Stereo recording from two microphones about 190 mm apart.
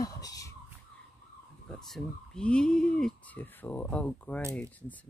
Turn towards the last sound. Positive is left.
turn(degrees=10)  # may be behind; listen again after turning